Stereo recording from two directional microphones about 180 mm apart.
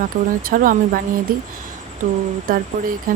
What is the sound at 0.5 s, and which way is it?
Speech, 50° right (ahead or behind).